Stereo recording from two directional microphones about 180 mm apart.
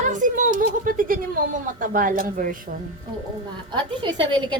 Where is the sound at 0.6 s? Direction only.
50° right (ahead or behind).